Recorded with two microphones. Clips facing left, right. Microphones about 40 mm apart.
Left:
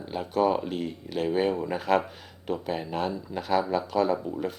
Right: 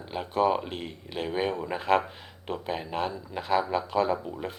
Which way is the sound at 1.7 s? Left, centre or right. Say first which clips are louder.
Right 2 dB; right.